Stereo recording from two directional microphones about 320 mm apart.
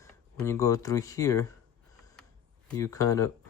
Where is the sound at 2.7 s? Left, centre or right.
Centre.